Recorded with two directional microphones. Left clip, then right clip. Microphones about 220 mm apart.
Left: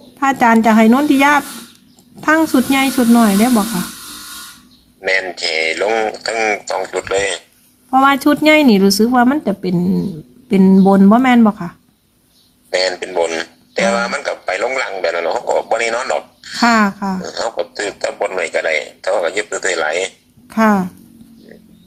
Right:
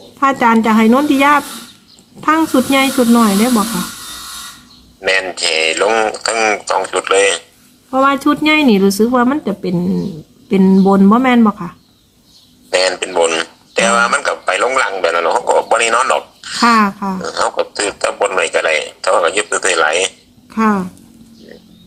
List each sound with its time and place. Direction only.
0.2 s speech: 10° left (ahead or behind)
4.9 s a man's voice: 20° right (ahead or behind)
7.9 s speech: 25° left (ahead or behind)
12.7 s speech: 20° right (ahead or behind)
16.6 s speech: 10° left (ahead or behind)
17.2 s a man's voice: 20° right (ahead or behind)
20.5 s speech: 20° left (ahead or behind)